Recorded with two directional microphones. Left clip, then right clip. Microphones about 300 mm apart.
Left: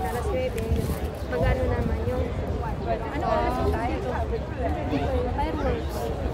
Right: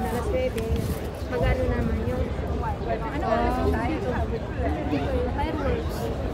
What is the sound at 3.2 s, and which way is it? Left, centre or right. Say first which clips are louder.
Speech: right 1 dB; left.